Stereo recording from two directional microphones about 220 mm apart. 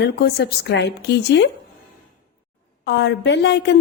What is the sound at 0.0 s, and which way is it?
Speech, 50° left (ahead or behind).